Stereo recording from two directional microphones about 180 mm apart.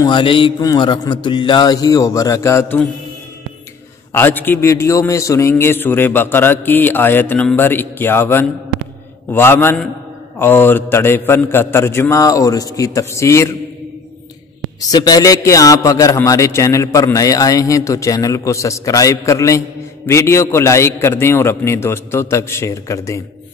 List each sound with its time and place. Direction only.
0.0 s a man's voice: 25° left (ahead or behind)
4.1 s a man's voice: 10° left (ahead or behind)
14.8 s a man's voice: 20° left (ahead or behind)